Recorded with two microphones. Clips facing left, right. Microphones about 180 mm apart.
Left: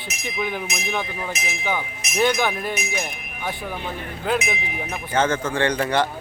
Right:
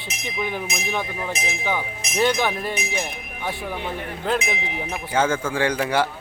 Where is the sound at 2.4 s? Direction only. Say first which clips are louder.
Even; centre (ahead or behind).